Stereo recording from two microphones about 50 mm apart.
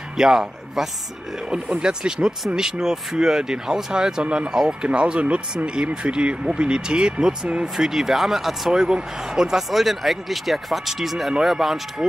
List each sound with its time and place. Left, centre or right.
0.2 s speech: centre